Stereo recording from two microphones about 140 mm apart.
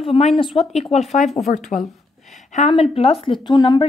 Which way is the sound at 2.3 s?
60° left (ahead or behind).